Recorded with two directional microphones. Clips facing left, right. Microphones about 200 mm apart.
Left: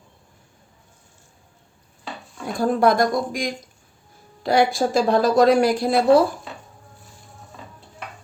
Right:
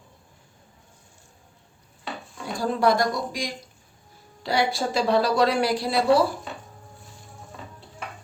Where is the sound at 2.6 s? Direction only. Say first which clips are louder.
Left 4 dB; 50° left (ahead or behind).